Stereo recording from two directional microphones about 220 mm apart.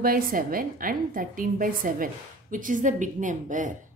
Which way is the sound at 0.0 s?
40° right (ahead or behind).